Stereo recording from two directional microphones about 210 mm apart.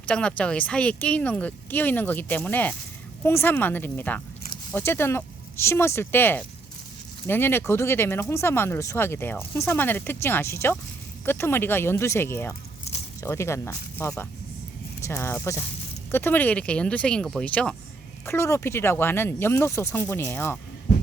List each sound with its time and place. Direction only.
0.0 s speech: 5° left (ahead or behind)